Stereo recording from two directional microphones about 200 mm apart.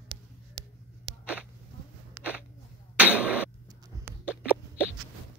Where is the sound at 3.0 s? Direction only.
5° right (ahead or behind).